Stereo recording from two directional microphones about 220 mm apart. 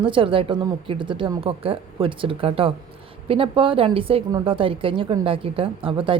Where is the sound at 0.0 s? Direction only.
25° right (ahead or behind).